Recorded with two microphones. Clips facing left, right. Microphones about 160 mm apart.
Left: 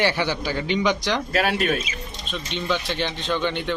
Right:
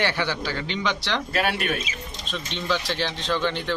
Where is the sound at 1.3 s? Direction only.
35° left (ahead or behind).